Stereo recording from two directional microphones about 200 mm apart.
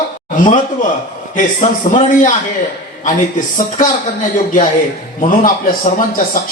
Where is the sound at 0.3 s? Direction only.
40° left (ahead or behind).